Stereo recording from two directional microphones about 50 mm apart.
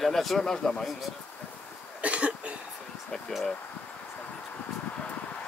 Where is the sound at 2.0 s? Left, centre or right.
Right.